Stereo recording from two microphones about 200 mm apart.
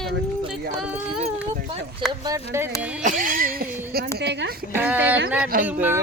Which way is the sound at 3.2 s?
45° right (ahead or behind).